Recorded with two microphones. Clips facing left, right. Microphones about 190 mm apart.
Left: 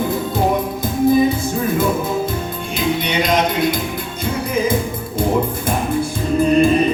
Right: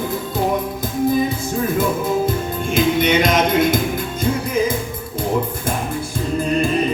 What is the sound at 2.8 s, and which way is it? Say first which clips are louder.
Music: right 4 dB; 50° right (ahead or behind).